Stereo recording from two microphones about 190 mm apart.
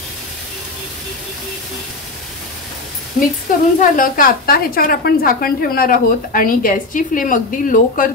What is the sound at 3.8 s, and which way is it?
A woman's voice, 45° left (ahead or behind).